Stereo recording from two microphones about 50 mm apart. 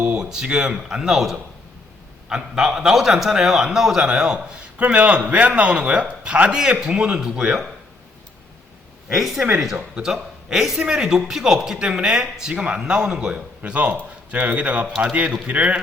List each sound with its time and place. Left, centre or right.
0.2 s a man's voice: centre
9.1 s speech: centre
10.8 s speech: centre
12.5 s a man's voice: right
12.8 s speech: centre
13.7 s a man's voice: right